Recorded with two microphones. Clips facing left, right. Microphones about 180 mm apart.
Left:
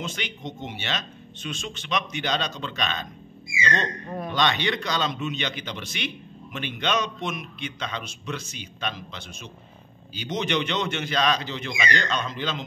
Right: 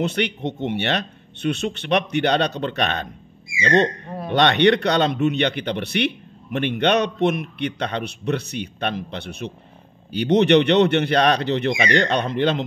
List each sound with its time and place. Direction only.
0.0 s a man's voice: 65° right (ahead or behind)